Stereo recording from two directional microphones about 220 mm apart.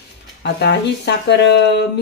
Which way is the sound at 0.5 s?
50° left (ahead or behind).